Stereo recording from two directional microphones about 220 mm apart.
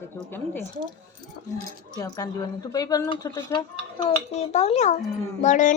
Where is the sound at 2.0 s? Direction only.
15° left (ahead or behind).